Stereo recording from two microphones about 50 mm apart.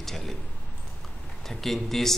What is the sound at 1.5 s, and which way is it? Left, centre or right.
Speech, centre.